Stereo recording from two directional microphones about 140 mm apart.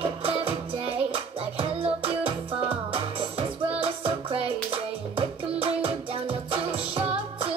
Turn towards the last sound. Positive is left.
turn(degrees=-40)  # may be behind; listen again after turning